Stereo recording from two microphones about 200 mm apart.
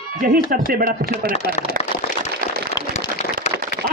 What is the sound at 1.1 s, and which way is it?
Speech, 30° left (ahead or behind).